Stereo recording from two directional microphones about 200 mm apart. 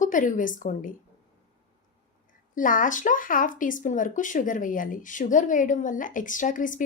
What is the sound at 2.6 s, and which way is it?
Speech, 40° left (ahead or behind).